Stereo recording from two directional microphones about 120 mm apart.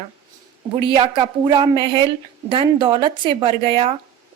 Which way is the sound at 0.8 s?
50° right (ahead or behind).